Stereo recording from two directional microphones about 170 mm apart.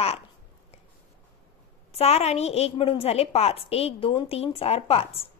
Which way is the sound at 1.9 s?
35° left (ahead or behind).